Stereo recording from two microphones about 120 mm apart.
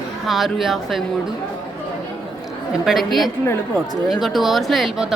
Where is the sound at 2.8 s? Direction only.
Centre (ahead or behind).